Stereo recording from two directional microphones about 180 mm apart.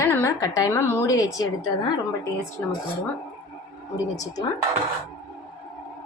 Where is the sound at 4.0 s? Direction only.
20° left (ahead or behind).